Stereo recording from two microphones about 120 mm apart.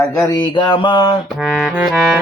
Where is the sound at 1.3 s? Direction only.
Centre (ahead or behind).